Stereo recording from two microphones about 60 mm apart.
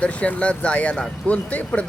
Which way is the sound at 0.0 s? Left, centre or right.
Left.